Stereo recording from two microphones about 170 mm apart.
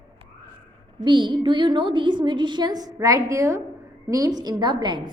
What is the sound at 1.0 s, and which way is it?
A woman's voice, 25° right (ahead or behind).